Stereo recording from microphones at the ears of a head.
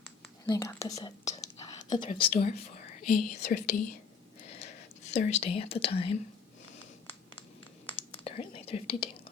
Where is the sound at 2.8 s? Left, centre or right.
Left.